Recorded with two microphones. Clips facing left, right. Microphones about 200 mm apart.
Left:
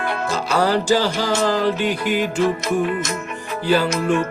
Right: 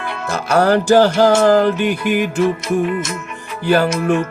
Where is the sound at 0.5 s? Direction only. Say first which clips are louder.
Right 6 dB; 60° right (ahead or behind).